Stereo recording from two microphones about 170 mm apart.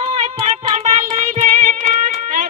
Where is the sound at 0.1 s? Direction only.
40° right (ahead or behind).